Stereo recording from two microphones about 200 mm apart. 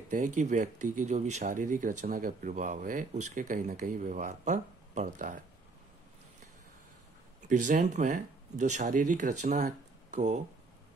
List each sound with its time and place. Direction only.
0.1 s speech: 40° right (ahead or behind)
7.4 s speech: 40° right (ahead or behind)